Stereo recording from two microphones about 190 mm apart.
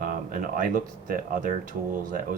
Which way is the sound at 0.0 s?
45° right (ahead or behind).